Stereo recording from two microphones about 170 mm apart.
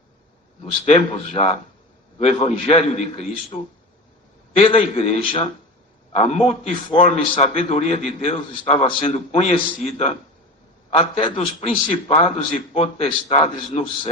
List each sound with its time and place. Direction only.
0.9 s a man's voice: 35° left (ahead or behind)